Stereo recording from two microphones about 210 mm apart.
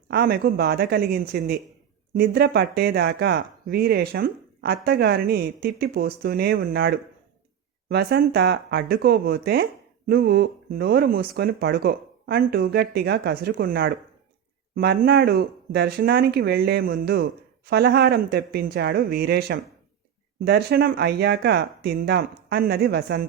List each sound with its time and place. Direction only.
0.1 s speech: 50° right (ahead or behind)